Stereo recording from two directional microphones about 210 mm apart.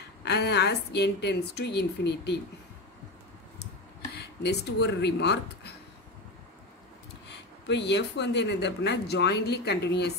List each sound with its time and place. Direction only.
0.2 s speech: 55° left (ahead or behind)
4.1 s speech: 50° left (ahead or behind)
7.2 s speech: 55° left (ahead or behind)